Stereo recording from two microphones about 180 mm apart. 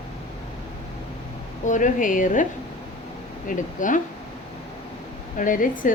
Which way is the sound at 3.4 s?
45° left (ahead or behind).